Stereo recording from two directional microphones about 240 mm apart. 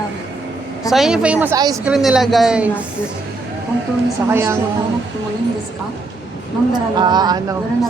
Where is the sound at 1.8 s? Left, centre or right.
Centre.